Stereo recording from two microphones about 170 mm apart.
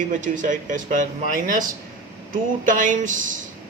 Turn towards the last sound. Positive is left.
turn(degrees=-50)  # may be behind; listen again after turning